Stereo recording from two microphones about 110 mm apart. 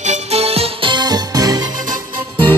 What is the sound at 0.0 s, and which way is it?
Music, 80° right.